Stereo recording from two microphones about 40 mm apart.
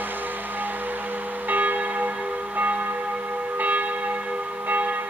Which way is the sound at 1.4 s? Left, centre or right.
Right.